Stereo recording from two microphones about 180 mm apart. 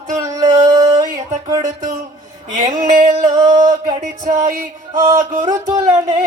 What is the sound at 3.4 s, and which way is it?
Music, 45° right (ahead or behind).